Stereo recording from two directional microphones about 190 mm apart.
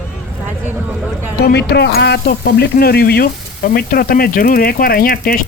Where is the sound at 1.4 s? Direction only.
60° left (ahead or behind).